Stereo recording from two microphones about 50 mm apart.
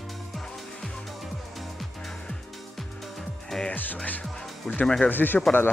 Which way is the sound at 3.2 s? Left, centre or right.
Centre.